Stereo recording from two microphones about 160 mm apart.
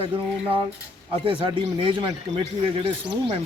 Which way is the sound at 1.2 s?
30° right (ahead or behind).